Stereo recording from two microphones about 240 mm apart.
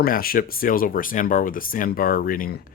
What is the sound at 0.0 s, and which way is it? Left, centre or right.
Speech, left.